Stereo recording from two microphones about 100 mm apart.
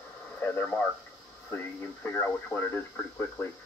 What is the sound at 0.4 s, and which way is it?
Speech, 20° left (ahead or behind).